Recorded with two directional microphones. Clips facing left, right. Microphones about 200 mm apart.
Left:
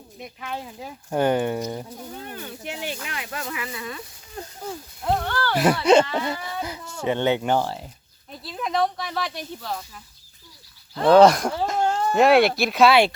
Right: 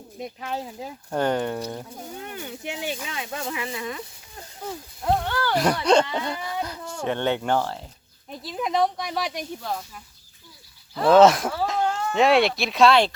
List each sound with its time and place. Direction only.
0.2 s speech: 35° right (ahead or behind)
1.1 s speech: 10° left (ahead or behind)
2.3 s speech: 15° right (ahead or behind)
5.3 s speech: 15° right (ahead or behind)
5.5 s speech: 5° left (ahead or behind)
8.5 s speech: 15° right (ahead or behind)
11.9 s a sound: 30° left (ahead or behind)
12.1 s speech: centre (ahead or behind)